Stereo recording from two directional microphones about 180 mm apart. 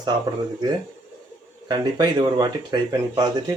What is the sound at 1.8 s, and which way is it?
Speech, 25° right (ahead or behind).